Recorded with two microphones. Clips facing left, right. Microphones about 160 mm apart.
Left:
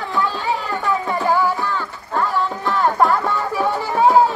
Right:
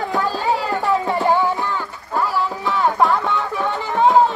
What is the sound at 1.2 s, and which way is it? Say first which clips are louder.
Music: left 1 dB; 20° right (ahead or behind).